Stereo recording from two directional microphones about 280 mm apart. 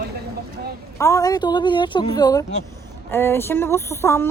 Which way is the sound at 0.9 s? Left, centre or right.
Centre.